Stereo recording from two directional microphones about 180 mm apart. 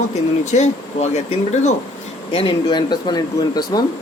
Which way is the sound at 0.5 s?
40° left (ahead or behind).